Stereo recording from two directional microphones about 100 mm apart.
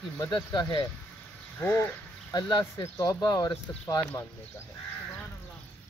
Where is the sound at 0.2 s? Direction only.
45° left (ahead or behind).